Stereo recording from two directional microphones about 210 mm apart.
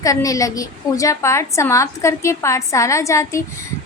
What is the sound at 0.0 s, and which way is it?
A woman's voice, 15° left (ahead or behind).